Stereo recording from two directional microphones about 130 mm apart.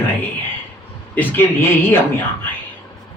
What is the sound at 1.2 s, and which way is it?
Speech, 15° left (ahead or behind).